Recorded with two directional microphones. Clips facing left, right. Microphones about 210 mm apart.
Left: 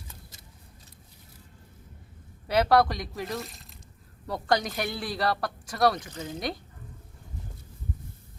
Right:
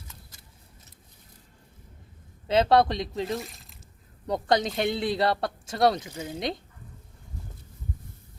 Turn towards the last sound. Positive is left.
turn(degrees=-25)  # may be behind; listen again after turning